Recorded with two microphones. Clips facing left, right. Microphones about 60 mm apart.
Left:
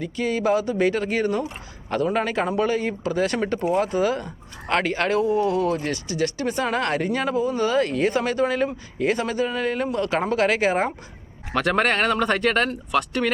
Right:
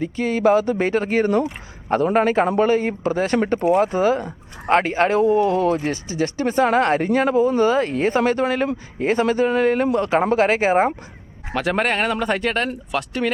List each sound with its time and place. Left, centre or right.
0.0 s speech: right
5.8 s speech: right
6.4 s speech: right
9.0 s speech: right
10.2 s speech: right
11.5 s speech: centre